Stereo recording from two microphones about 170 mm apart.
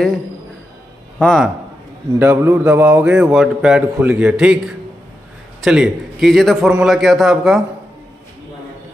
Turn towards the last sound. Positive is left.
turn(degrees=0)  # may be behind; listen again after turning